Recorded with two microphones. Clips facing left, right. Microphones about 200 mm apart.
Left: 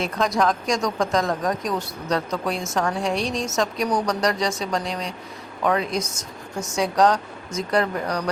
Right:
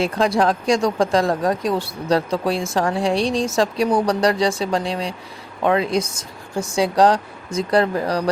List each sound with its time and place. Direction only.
0.0 s speech: 30° right (ahead or behind)